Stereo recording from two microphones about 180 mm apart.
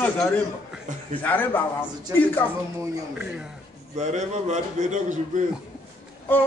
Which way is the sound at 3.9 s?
40° right (ahead or behind).